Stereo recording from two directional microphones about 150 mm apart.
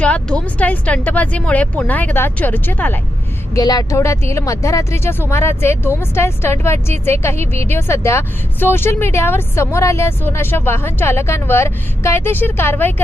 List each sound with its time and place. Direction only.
0.0 s a woman's voice: 10° left (ahead or behind)
3.5 s a woman's voice: 25° left (ahead or behind)